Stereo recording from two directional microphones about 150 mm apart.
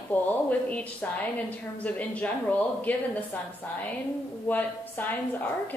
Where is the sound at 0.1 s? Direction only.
10° left (ahead or behind).